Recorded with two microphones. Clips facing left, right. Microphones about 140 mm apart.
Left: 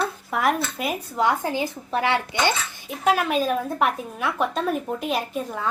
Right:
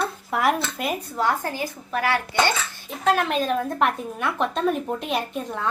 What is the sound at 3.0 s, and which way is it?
A woman's voice, 5° left (ahead or behind).